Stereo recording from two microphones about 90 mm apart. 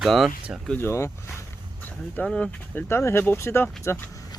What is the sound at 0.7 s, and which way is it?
Speech, 30° left (ahead or behind).